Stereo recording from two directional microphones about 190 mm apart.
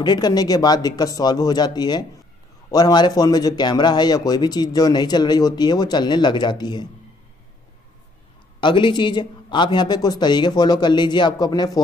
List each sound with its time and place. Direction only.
0.0 s speech: 20° left (ahead or behind)
8.5 s speech: 25° left (ahead or behind)